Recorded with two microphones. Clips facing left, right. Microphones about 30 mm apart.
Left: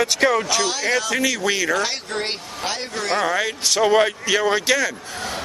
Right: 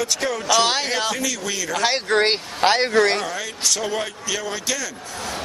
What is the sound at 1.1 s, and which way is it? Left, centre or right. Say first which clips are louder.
Speech: left 5 dB; left.